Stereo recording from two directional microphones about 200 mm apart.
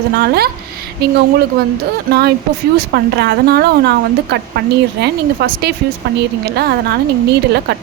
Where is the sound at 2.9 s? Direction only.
55° right (ahead or behind).